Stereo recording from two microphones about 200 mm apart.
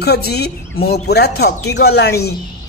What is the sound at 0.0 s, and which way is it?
Speech, 55° left (ahead or behind).